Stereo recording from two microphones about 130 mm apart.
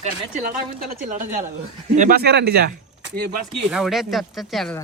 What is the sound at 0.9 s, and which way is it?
Speech, 85° right.